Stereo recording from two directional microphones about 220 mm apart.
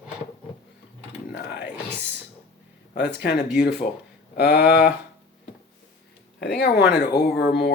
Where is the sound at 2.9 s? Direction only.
50° left (ahead or behind).